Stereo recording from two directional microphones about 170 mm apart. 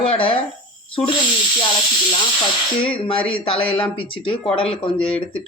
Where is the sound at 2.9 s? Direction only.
30° left (ahead or behind).